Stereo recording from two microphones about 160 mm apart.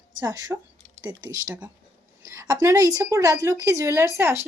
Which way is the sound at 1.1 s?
20° right (ahead or behind).